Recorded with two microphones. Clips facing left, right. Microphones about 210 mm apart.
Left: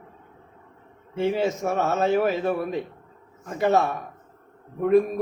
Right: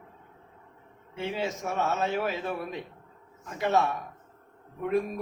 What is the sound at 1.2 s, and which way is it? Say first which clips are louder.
Speech: left 8 dB; 55° left (ahead or behind).